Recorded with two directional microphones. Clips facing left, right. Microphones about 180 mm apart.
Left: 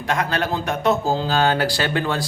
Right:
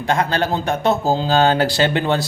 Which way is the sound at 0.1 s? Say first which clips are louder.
Right 3 dB; 30° right (ahead or behind).